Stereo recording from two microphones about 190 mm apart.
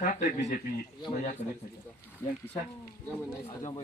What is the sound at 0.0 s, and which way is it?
Speech, 50° left (ahead or behind).